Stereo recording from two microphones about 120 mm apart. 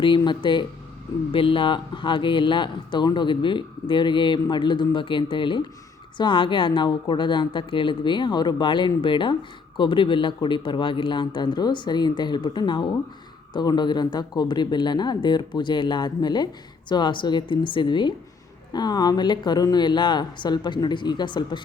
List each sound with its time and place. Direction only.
0.3 s speech: 40° left (ahead or behind)